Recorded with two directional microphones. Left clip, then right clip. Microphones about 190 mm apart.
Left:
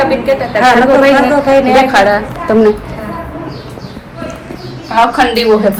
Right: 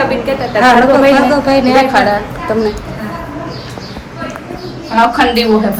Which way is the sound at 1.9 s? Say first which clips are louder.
Left 2 dB; 25° left (ahead or behind).